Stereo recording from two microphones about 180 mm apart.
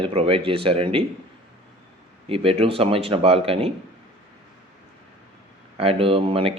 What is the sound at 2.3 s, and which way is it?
Speech, 30° right (ahead or behind).